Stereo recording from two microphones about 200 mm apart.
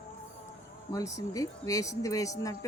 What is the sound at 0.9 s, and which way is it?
Speech, 15° left (ahead or behind).